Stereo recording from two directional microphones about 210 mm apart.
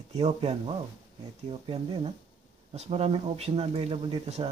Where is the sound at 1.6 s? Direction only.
30° right (ahead or behind).